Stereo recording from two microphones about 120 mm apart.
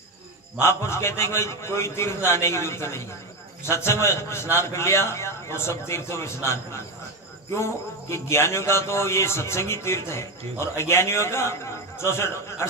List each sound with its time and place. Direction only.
0.6 s a man's voice: 20° left (ahead or behind)